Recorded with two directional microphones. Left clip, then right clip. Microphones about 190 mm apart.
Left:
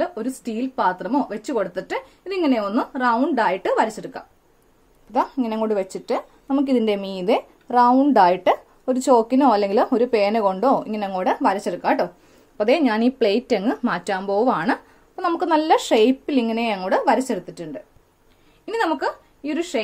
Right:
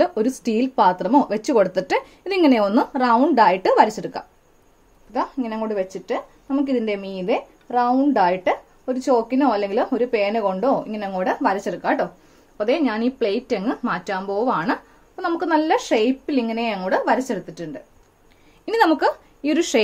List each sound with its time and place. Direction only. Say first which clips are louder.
0.0 s speech: right 6 dB; 30° right (ahead or behind); by 4.2 s 15° right (ahead or behind)
5.1 s speech: left 3 dB; 30° left (ahead or behind)
18.7 s speech: right 5 dB; 20° right (ahead or behind)